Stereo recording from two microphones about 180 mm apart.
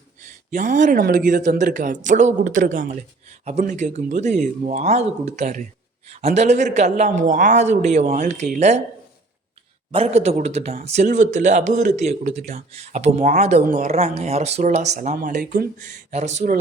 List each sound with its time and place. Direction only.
0.5 s speech: 45° right (ahead or behind)
9.9 s speech: 35° right (ahead or behind)
13.6 s speech: 50° right (ahead or behind)
13.9 s speech: 35° right (ahead or behind)